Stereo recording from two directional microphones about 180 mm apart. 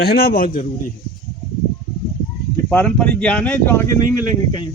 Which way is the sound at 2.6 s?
5° left (ahead or behind).